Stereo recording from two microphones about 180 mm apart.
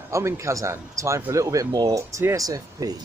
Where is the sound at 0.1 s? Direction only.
15° right (ahead or behind).